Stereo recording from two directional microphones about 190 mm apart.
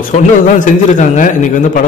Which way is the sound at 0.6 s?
40° left (ahead or behind).